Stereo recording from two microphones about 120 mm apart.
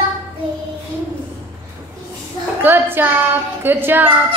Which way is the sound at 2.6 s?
15° right (ahead or behind).